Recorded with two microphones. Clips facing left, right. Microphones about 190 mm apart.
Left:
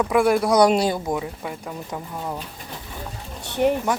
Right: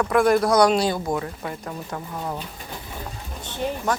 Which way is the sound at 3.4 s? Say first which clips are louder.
Left 8 dB; 65° left (ahead or behind).